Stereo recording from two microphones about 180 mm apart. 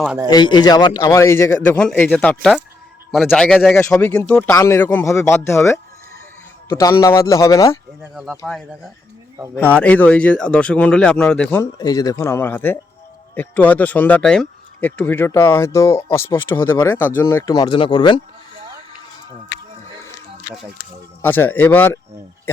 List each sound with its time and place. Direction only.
0.3 s a man's voice: 25° left (ahead or behind)
8.4 s a man's voice: centre (ahead or behind)
9.6 s speech: 10° left (ahead or behind)
11.6 s a man's voice: 20° left (ahead or behind)
21.2 s speech: 10° left (ahead or behind)